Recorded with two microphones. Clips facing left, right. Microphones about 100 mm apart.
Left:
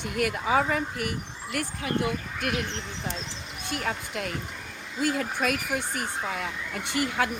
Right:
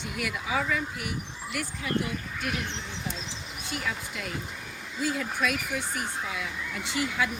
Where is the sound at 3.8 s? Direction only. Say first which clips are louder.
Left 5 dB; 55° left (ahead or behind).